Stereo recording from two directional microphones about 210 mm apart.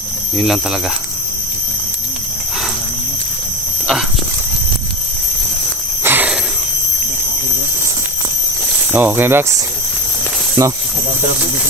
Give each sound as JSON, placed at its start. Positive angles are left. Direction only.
{"t": 0.4, "sound": "speech", "side_deg": 0}
{"t": 6.0, "sound": "wheeze", "side_deg": -10}
{"t": 8.9, "sound": "speech", "side_deg": -10}
{"t": 10.6, "sound": "speech", "side_deg": -15}